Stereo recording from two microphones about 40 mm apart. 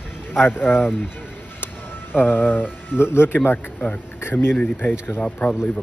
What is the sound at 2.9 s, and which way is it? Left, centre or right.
Speech, left.